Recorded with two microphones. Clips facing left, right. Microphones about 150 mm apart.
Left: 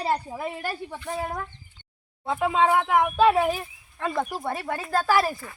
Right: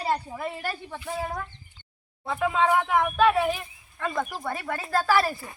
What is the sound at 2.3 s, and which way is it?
Speech, 20° left (ahead or behind).